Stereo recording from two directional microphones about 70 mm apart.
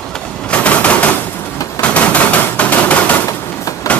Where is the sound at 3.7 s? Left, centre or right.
Left.